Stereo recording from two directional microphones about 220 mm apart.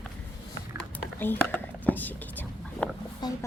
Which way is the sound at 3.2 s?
20° left (ahead or behind).